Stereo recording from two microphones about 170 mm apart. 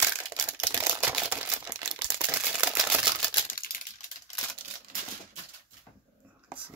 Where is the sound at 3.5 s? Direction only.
60° left (ahead or behind).